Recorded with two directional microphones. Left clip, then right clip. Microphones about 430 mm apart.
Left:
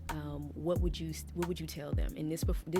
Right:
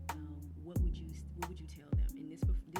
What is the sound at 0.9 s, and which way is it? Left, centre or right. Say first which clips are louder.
Speech: left 10 dB; left.